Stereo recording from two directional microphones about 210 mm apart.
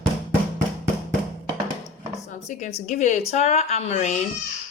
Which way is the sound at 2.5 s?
35° left (ahead or behind).